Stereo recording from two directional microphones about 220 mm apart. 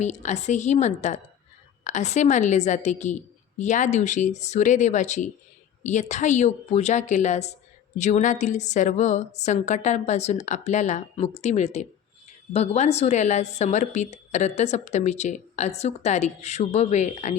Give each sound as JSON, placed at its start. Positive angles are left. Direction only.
{"t": 0.0, "sound": "a woman's voice", "side_deg": 30}